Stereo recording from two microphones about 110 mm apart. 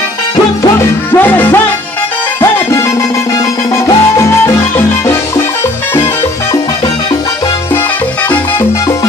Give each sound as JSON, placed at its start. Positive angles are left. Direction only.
{"t": 0.7, "sound": "music", "side_deg": 15}
{"t": 2.4, "sound": "music", "side_deg": 25}
{"t": 3.3, "sound": "salsa music", "side_deg": 30}